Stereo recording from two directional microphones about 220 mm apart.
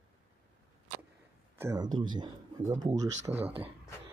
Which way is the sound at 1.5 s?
15° right (ahead or behind).